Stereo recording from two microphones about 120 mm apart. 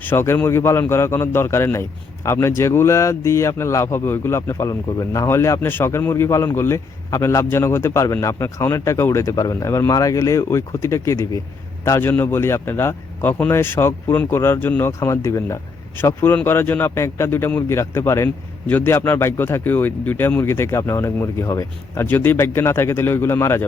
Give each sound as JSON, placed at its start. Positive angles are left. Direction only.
{"t": 0.1, "sound": "speech", "side_deg": 20}